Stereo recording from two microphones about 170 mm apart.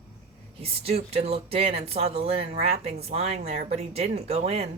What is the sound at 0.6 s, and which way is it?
Speech, 35° right (ahead or behind).